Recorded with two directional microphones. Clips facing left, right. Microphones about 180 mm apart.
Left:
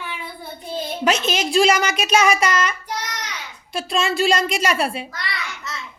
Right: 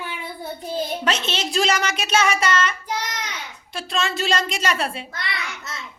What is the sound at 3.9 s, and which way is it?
A woman's voice, 10° left (ahead or behind).